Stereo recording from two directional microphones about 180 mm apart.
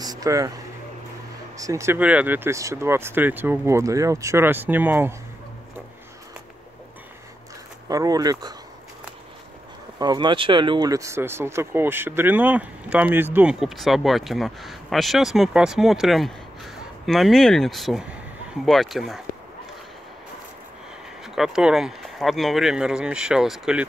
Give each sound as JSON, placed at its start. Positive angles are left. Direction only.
{"t": 0.0, "sound": "a sound", "side_deg": -20}
{"t": 1.6, "sound": "speech", "side_deg": -15}
{"t": 7.9, "sound": "speech", "side_deg": -20}
{"t": 9.9, "sound": "speech", "side_deg": -25}
{"t": 21.2, "sound": "speech", "side_deg": -5}